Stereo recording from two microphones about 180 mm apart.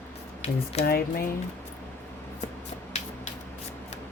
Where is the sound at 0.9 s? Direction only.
55° left (ahead or behind).